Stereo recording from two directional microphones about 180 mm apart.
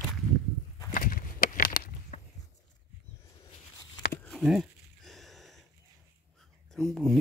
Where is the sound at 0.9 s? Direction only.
50° left (ahead or behind).